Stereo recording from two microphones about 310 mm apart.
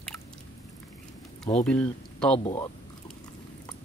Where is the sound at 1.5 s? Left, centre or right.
Centre.